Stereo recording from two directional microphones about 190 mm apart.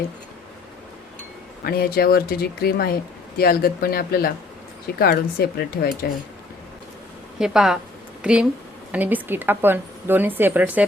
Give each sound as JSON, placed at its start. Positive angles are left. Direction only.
{"t": 1.6, "sound": "speech", "side_deg": 55}
{"t": 7.3, "sound": "a woman's voice", "side_deg": -5}